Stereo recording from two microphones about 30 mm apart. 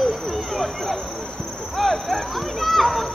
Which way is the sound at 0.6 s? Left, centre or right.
Centre.